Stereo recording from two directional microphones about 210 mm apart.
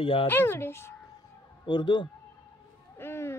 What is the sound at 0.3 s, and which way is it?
Speech, 10° left (ahead or behind).